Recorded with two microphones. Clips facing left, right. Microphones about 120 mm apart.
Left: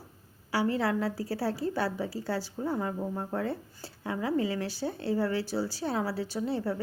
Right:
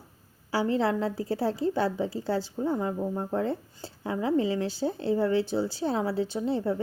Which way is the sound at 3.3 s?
25° right (ahead or behind).